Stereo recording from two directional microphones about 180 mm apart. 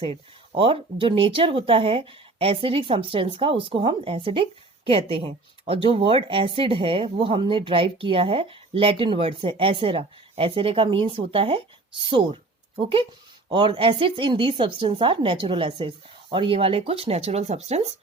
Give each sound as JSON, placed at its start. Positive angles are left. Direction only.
{"t": 0.0, "sound": "a woman's voice", "side_deg": -30}